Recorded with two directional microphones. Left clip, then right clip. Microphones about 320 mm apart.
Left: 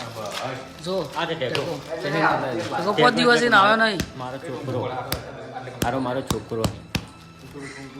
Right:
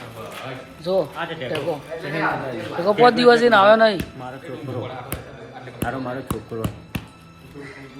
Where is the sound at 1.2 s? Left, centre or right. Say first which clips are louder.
Left 2 dB; left.